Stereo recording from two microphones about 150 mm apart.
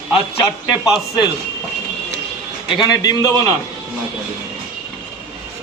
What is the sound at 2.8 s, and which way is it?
Speech, 25° left (ahead or behind).